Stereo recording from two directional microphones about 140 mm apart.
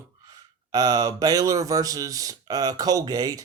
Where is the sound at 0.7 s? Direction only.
30° right (ahead or behind).